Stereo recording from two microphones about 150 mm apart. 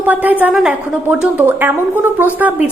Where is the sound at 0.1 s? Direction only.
10° right (ahead or behind).